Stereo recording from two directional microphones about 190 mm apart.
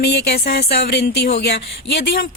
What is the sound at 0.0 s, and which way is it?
A woman's voice, 60° left (ahead or behind).